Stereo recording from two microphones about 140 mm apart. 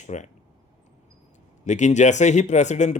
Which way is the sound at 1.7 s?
60° left (ahead or behind).